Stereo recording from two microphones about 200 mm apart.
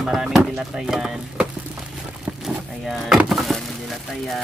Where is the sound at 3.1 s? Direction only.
Centre (ahead or behind).